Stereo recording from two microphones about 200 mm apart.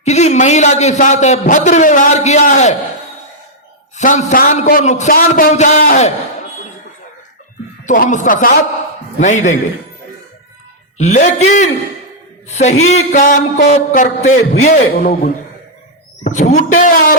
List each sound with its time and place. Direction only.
0.0 s a man's voice: 35° left (ahead or behind)
3.9 s a man's voice: 35° left (ahead or behind)
7.9 s a man's voice: 40° left (ahead or behind)
11.0 s a man's voice: 35° left (ahead or behind)